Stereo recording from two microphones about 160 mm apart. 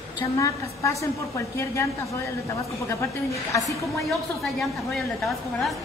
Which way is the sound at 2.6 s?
20° left (ahead or behind).